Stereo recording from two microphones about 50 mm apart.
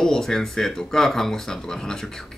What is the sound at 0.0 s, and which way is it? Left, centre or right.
Speech, centre.